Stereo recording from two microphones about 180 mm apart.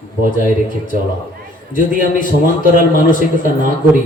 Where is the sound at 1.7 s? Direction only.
45° left (ahead or behind).